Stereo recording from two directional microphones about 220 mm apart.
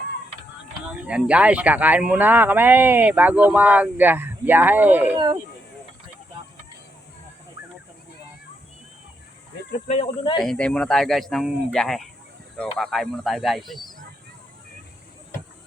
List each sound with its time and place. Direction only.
1.0 s speech: 5° right (ahead or behind)
9.8 s speech: 25° left (ahead or behind)
10.4 s speech: 5° left (ahead or behind)